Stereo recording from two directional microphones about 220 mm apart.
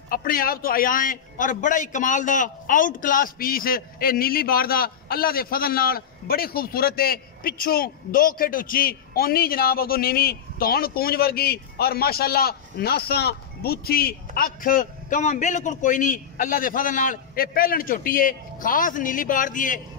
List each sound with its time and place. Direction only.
0.1 s a man's voice: 40° left (ahead or behind)